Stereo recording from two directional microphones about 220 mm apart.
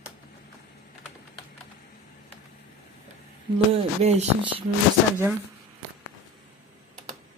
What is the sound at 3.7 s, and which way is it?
Speech, 30° right (ahead or behind).